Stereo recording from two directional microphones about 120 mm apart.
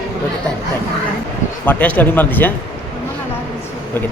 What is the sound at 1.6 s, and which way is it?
Speech, 15° left (ahead or behind).